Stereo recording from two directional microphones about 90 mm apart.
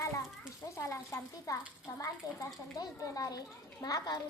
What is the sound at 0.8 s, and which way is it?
A child's voice, 35° left (ahead or behind).